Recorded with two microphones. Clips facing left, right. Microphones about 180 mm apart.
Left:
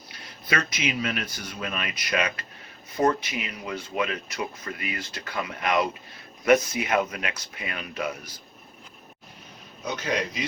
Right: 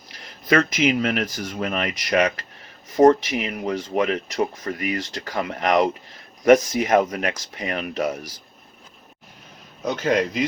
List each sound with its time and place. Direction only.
0.5 s speech: 50° right (ahead or behind)
3.5 s speech: 50° right (ahead or behind)
9.8 s speech: 50° right (ahead or behind)